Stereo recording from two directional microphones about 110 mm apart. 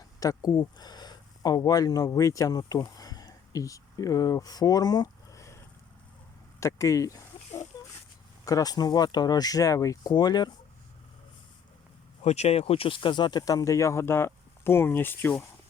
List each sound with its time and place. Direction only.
0.2 s speech: 35° left (ahead or behind)
12.2 s speech: 75° left (ahead or behind); by 15.4 s 20° left (ahead or behind)